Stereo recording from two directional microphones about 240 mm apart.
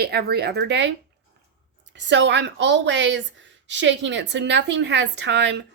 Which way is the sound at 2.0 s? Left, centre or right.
Right.